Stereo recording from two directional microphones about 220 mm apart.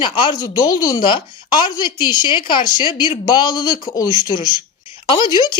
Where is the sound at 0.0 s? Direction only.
20° left (ahead or behind).